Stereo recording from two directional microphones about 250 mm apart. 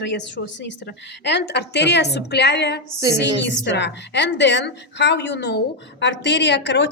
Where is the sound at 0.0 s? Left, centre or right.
Left.